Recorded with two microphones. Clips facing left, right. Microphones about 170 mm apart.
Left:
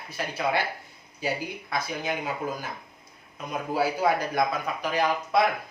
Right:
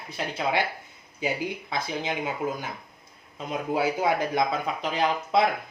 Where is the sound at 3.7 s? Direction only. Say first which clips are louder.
Even; 20° right (ahead or behind).